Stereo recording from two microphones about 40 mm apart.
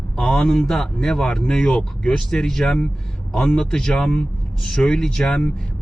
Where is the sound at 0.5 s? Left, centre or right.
Centre.